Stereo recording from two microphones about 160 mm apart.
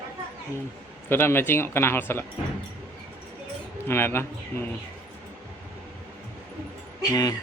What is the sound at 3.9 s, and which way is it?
Speech, 15° left (ahead or behind).